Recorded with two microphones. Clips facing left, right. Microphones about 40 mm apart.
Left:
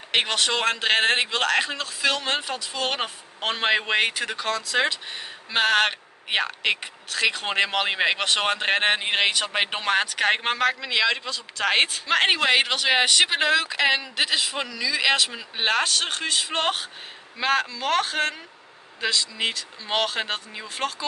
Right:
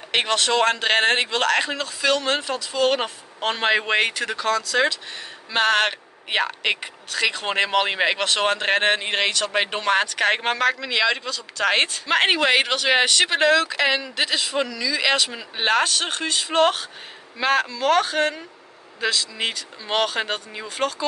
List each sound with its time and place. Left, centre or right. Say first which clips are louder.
0.1 s speech: right 2 dB; centre
4.6 s speech: right 2 dB; centre
5.5 s speech: right 1 dB; centre
11.2 s speech: right 3 dB; centre